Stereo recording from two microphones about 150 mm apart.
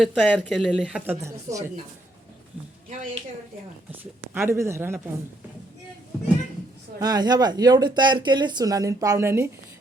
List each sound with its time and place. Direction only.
0.0 s speech: 5° left (ahead or behind)
1.2 s speech: 20° right (ahead or behind)
4.0 s speech: 15° right (ahead or behind)
7.0 s speech: 25° right (ahead or behind)